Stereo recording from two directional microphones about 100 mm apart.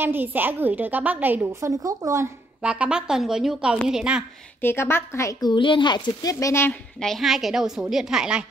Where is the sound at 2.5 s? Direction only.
10° right (ahead or behind).